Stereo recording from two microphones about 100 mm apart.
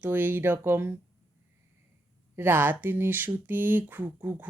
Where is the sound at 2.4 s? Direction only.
20° right (ahead or behind).